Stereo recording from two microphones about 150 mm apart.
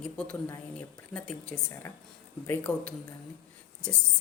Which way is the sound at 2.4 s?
10° left (ahead or behind).